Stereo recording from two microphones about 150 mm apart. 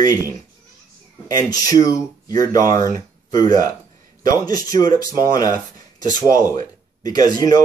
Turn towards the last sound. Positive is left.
turn(degrees=25)  # may be behind; listen again after turning